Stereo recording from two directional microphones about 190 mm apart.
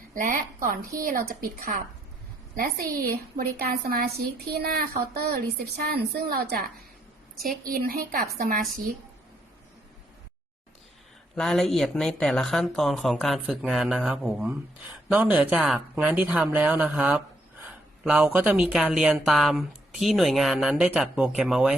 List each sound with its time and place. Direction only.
0.1 s a woman's voice: 45° right (ahead or behind)
11.3 s speech: centre (ahead or behind)